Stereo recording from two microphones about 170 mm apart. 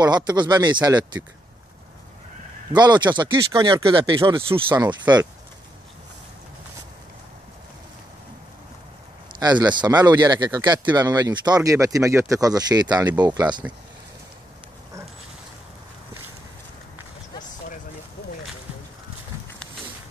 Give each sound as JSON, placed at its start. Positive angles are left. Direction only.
{"t": 0.0, "sound": "speech", "side_deg": -25}
{"t": 2.7, "sound": "speech", "side_deg": -25}
{"t": 9.4, "sound": "speech", "side_deg": -25}